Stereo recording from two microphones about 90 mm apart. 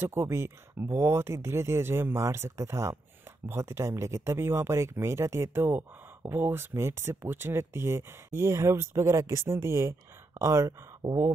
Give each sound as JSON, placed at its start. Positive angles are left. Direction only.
{"t": 0.0, "sound": "speech", "side_deg": -25}
{"t": 11.0, "sound": "speech", "side_deg": -90}